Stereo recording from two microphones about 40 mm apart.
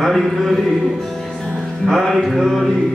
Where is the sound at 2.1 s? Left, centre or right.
Centre.